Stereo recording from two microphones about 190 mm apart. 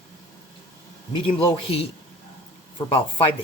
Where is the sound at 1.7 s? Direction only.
30° left (ahead or behind).